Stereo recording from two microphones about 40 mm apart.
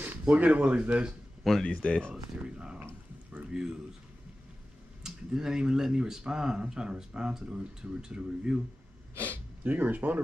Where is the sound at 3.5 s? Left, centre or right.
Centre.